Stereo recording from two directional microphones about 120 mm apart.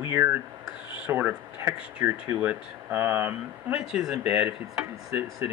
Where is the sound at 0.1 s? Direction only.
15° right (ahead or behind).